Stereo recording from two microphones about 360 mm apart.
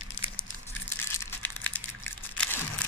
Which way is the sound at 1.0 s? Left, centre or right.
Centre.